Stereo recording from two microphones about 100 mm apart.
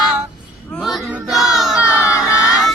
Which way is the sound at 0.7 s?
Centre (ahead or behind).